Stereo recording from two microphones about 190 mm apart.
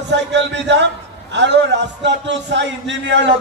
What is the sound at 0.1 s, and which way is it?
A man's voice, 65° right (ahead or behind).